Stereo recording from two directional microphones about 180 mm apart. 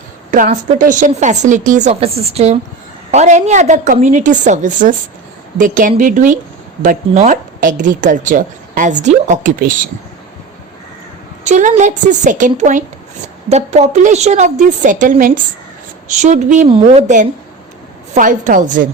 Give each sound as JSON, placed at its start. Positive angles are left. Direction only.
{"t": 0.3, "sound": "a woman's voice", "side_deg": -45}
{"t": 11.4, "sound": "a woman's voice", "side_deg": -40}
{"t": 16.6, "sound": "a woman's voice", "side_deg": -30}